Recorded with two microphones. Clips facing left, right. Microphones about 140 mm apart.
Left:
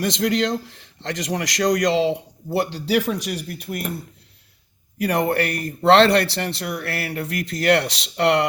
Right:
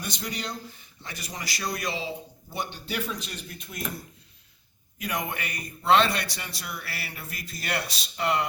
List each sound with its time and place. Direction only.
0.0 s a man's voice: 90° left; by 3.8 s 65° left (ahead or behind)
4.9 s a man's voice: 70° left (ahead or behind)